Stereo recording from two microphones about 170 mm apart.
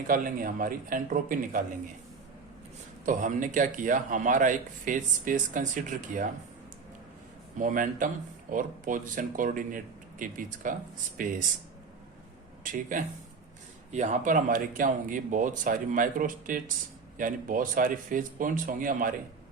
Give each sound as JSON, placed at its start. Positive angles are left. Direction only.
{"t": 0.1, "sound": "a man's voice", "side_deg": -55}
{"t": 3.1, "sound": "a man's voice", "side_deg": -50}
{"t": 7.6, "sound": "a man's voice", "side_deg": -50}
{"t": 12.6, "sound": "a man's voice", "side_deg": -50}